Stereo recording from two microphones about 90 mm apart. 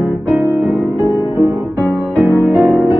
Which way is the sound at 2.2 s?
20° right (ahead or behind).